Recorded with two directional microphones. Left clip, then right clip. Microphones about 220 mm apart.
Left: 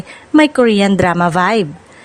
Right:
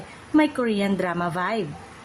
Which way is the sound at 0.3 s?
45° left (ahead or behind).